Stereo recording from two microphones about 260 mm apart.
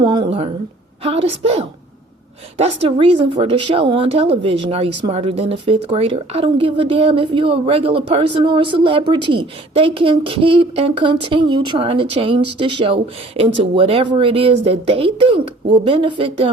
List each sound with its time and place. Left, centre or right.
0.0 s a woman's voice: centre